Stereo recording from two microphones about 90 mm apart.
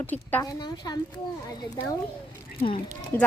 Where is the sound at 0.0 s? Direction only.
20° left (ahead or behind).